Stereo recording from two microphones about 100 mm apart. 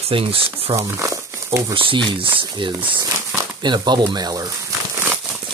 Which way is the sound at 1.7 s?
60° right (ahead or behind).